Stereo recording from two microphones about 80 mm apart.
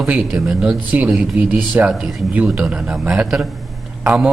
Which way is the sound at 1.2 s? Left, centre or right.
Centre.